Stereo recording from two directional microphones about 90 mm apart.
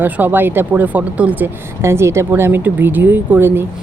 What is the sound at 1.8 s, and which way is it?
Speech, 30° right (ahead or behind).